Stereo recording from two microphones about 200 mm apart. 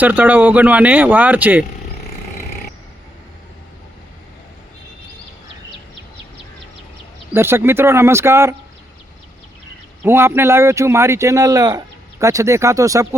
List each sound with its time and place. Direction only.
0.0 s speech: 10° right (ahead or behind)
7.3 s speech: 10° right (ahead or behind)
10.0 s speech: 10° right (ahead or behind)